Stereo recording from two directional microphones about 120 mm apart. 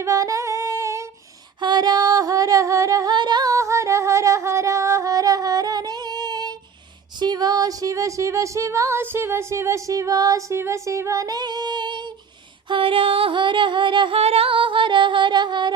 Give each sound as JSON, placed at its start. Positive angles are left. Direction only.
{"t": 0.0, "sound": "singing", "side_deg": -30}
{"t": 1.6, "sound": "singing", "side_deg": -35}
{"t": 7.2, "sound": "a sound", "side_deg": -35}
{"t": 14.2, "sound": "female singing", "side_deg": -55}